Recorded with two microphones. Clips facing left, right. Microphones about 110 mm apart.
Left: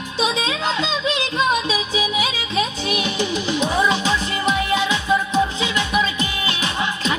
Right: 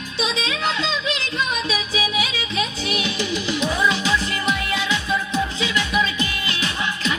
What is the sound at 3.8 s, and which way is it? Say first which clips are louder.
Music: left 2 dB; 30° left (ahead or behind).